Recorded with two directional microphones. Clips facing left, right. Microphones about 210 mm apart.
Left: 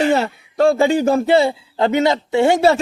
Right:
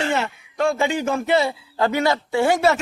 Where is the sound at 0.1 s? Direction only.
35° left (ahead or behind).